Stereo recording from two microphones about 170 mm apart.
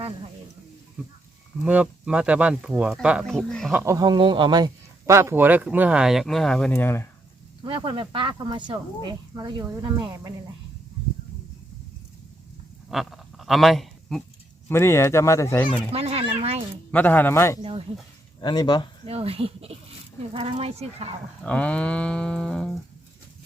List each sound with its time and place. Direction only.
1.6 s a man's voice: 10° right (ahead or behind)
3.7 s a man's voice: 15° right (ahead or behind); by 7.1 s 15° left (ahead or behind)
7.6 s speech: 30° right (ahead or behind)
12.9 s duck: centre (ahead or behind)
14.7 s speech: 15° left (ahead or behind)
15.9 s speech: 35° right (ahead or behind)
16.9 s speech: 10° left (ahead or behind)
17.6 s speech: 35° right (ahead or behind)
18.3 s speech: 25° left (ahead or behind)
19.0 s speech: 35° right (ahead or behind)
21.4 s speech: 5° left (ahead or behind)